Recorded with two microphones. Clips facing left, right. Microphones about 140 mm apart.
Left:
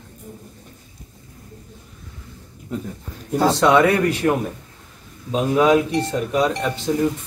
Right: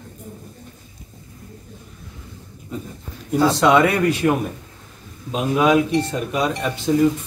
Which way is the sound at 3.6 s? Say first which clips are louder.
Left 1 dB; 15° right (ahead or behind).